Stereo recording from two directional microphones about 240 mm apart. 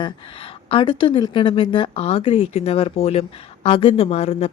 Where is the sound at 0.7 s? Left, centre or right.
Left.